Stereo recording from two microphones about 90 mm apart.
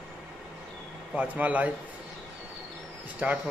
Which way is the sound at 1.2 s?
15° right (ahead or behind).